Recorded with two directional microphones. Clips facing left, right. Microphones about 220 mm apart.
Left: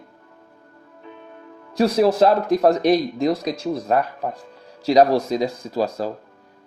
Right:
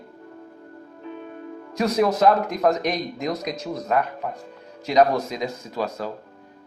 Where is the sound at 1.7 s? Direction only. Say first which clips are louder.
Left 4 dB; 30° left (ahead or behind).